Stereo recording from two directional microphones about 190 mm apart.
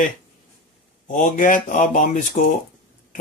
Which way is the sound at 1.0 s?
45° left (ahead or behind).